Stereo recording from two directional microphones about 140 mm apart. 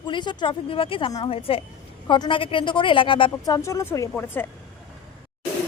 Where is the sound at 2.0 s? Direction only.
30° left (ahead or behind).